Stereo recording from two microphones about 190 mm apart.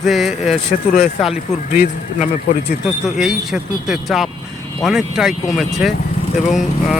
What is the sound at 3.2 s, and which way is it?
Speech, centre (ahead or behind).